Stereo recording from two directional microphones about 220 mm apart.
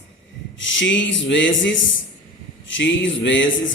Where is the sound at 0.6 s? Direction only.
60° left (ahead or behind).